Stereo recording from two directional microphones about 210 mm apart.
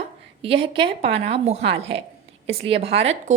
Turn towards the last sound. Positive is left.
turn(degrees=-30)  # may be behind; listen again after turning